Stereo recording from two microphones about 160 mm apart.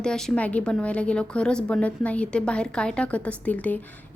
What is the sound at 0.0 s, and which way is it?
A woman's voice, 5° left (ahead or behind).